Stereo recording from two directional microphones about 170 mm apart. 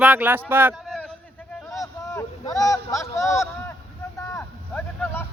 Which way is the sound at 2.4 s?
20° left (ahead or behind).